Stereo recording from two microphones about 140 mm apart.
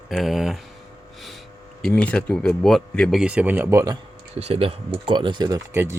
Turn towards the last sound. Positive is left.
turn(degrees=-20)  # may be behind; listen again after turning